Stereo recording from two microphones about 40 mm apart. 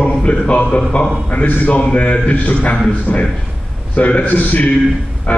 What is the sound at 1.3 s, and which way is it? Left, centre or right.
A man's voice, left.